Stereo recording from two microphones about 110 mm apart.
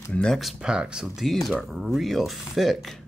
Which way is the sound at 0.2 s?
Centre (ahead or behind).